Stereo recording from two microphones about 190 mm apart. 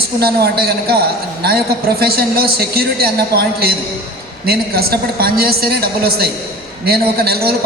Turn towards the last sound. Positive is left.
turn(degrees=-55)  # may be behind; listen again after turning